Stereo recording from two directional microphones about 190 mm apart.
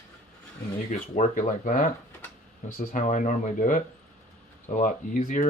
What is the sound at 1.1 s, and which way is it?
Speech, 40° left (ahead or behind).